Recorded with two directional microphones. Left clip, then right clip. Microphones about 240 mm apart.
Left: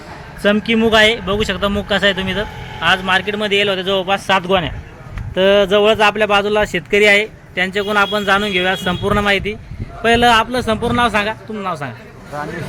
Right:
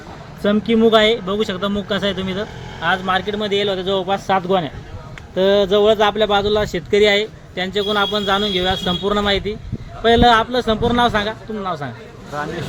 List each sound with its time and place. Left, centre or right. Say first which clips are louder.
0.4 s speech: left 1 dB; centre